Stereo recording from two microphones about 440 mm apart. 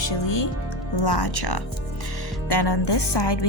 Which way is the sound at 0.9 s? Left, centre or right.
Left.